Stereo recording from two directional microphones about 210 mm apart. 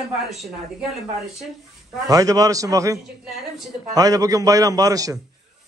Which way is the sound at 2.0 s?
15° right (ahead or behind).